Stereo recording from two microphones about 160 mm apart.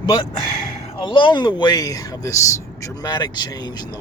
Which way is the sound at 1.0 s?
30° left (ahead or behind).